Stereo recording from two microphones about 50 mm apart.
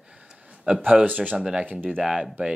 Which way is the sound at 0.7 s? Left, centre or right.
Right.